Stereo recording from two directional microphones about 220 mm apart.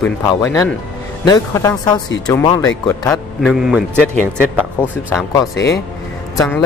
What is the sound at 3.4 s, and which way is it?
Speech, centre (ahead or behind).